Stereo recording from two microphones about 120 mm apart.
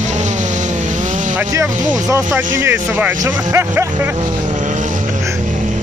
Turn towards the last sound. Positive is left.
turn(degrees=-20)  # may be behind; listen again after turning